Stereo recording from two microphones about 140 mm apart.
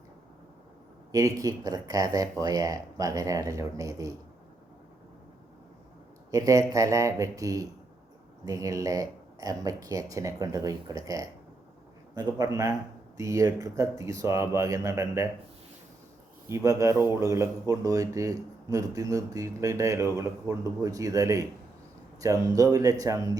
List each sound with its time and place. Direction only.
1.1 s speech: 25° right (ahead or behind)
6.3 s speech: 25° right (ahead or behind)
16.5 s speech: 20° right (ahead or behind)